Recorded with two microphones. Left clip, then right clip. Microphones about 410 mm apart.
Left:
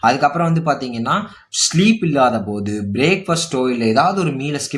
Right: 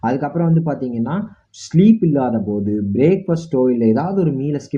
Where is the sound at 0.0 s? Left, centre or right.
Centre.